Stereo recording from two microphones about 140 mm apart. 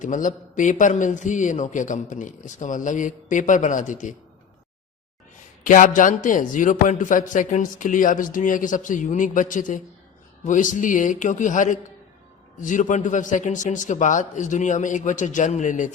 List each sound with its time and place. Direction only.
0.0 s a man's voice: 65° left (ahead or behind)
5.6 s a man's voice: 70° left (ahead or behind)